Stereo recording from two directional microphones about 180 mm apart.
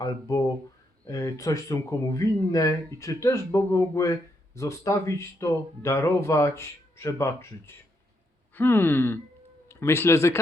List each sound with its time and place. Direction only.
0.0 s speech: 20° left (ahead or behind)